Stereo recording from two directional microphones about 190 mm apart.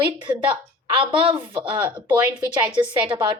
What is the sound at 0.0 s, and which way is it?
A woman's voice, 25° right (ahead or behind).